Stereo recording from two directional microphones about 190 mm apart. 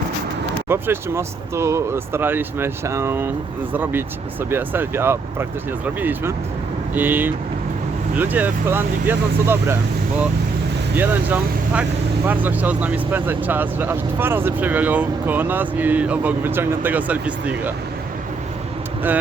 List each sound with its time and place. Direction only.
0.7 s speech: 15° right (ahead or behind)
10.9 s speech: 10° right (ahead or behind)